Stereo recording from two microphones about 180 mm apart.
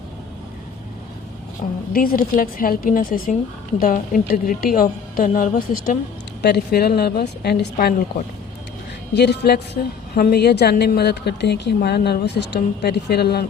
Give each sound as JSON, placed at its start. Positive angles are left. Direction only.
{"t": 1.9, "sound": "a woman's voice", "side_deg": 55}
{"t": 6.4, "sound": "a woman's voice", "side_deg": 65}
{"t": 9.1, "sound": "a woman's voice", "side_deg": 65}